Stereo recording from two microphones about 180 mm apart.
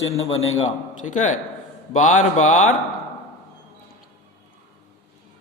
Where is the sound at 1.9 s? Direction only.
40° left (ahead or behind).